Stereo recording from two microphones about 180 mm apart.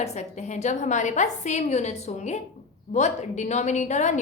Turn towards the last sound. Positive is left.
turn(degrees=40)  # may be behind; listen again after turning